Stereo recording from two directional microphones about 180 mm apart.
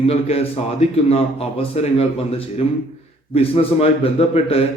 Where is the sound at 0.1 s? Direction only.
35° left (ahead or behind).